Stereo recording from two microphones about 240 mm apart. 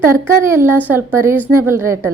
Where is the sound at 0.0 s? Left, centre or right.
Centre.